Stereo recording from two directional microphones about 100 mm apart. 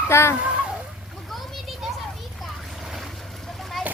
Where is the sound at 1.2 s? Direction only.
Centre (ahead or behind).